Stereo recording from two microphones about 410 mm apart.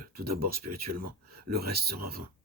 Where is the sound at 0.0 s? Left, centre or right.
Right.